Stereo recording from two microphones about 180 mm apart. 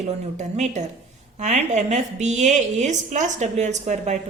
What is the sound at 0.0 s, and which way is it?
A woman's voice, 40° right (ahead or behind).